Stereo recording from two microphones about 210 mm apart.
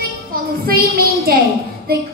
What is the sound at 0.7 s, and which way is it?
Child singing, 45° right (ahead or behind).